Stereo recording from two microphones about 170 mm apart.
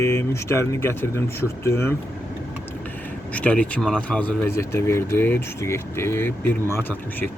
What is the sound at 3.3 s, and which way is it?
Speech, 5° left (ahead or behind).